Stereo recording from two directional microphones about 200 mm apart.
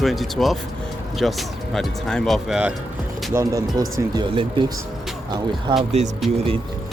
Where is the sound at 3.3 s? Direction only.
15° right (ahead or behind).